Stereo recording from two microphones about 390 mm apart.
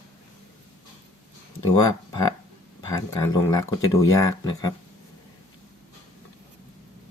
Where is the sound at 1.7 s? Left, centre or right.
Centre.